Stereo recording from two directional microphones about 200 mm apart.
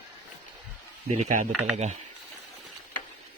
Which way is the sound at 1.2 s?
40° right (ahead or behind).